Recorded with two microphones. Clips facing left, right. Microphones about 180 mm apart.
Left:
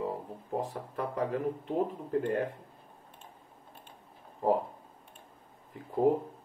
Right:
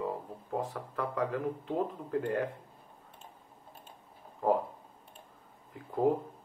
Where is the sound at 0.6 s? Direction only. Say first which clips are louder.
Even; 30° left (ahead or behind).